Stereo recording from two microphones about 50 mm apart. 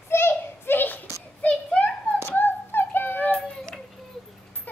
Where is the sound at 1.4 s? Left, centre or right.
Left.